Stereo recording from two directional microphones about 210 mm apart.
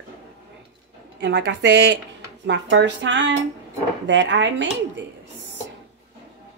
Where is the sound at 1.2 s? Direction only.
55° right (ahead or behind).